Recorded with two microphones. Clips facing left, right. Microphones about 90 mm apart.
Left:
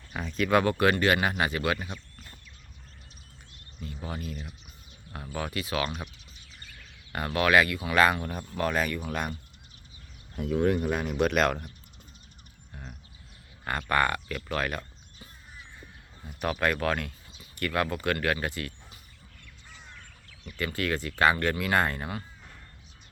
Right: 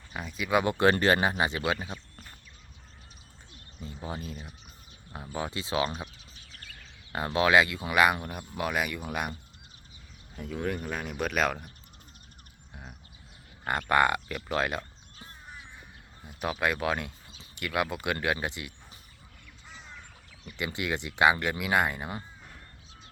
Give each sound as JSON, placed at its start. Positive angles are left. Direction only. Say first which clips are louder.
{"t": 0.1, "sound": "speech", "louder": "left 3 dB", "side_deg": -5}
{"t": 0.7, "sound": "speech", "louder": "right 1 dB", "side_deg": -25}
{"t": 3.8, "sound": "speech", "louder": "even", "side_deg": -25}
{"t": 7.1, "sound": "speech", "louder": "even", "side_deg": -20}
{"t": 10.3, "sound": "speech", "louder": "left 7 dB", "side_deg": 5}
{"t": 13.7, "sound": "speech", "louder": "right 2 dB", "side_deg": -20}
{"t": 16.2, "sound": "speech", "louder": "left 2 dB", "side_deg": -15}
{"t": 20.6, "sound": "speech", "louder": "left 2 dB", "side_deg": -20}